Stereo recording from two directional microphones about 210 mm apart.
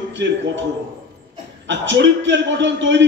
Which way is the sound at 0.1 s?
60° right (ahead or behind).